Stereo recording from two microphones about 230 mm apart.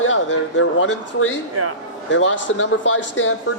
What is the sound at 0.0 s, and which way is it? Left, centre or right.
A man's voice, left.